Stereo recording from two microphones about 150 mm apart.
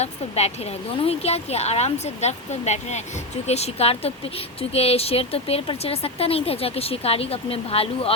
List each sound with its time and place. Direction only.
0.0 s a woman's voice: 45° left (ahead or behind)